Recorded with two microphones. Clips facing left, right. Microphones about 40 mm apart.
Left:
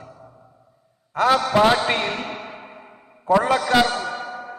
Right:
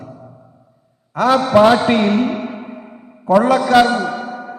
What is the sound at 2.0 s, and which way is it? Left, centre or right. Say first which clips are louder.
Music: right 10 dB; right.